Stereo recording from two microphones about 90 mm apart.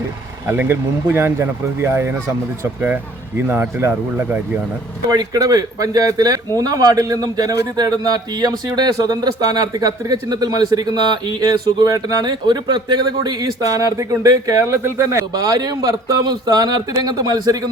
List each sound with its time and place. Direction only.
0.4 s speech: 20° right (ahead or behind)
3.4 s speech: 25° right (ahead or behind)
5.0 s a man's voice: 45° right (ahead or behind)
15.3 s a man's voice: 45° right (ahead or behind)